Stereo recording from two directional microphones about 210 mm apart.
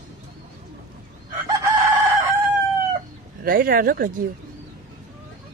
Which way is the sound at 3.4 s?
45° right (ahead or behind).